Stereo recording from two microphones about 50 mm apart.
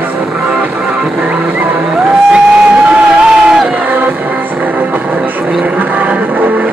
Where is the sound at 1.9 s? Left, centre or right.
Centre.